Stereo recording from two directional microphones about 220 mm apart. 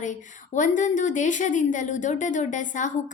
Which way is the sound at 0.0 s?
35° left (ahead or behind).